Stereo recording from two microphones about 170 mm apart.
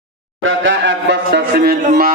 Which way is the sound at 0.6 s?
90° right.